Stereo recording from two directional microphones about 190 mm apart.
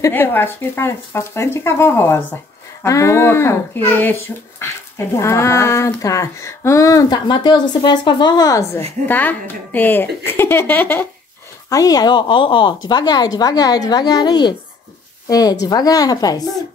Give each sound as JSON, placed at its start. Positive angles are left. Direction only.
{"t": 0.0, "sound": "a woman's voice", "side_deg": 10}